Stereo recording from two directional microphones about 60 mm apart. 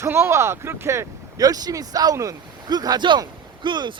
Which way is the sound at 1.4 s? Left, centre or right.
Right.